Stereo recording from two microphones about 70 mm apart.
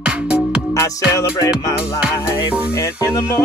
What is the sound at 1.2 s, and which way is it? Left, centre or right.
Music, left.